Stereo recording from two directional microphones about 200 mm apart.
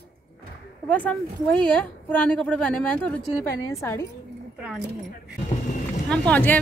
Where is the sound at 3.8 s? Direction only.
15° left (ahead or behind).